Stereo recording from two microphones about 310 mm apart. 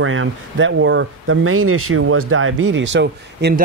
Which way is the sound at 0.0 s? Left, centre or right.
Right.